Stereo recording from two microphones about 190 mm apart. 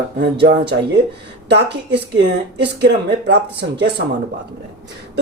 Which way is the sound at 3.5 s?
60° right (ahead or behind).